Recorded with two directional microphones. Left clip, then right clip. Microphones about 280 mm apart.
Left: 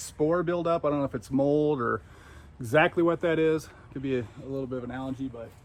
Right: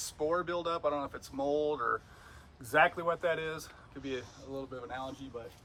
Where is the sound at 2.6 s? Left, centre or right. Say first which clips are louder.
Left 5 dB; left.